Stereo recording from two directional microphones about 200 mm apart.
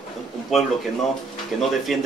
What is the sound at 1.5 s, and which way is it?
Speech, centre (ahead or behind).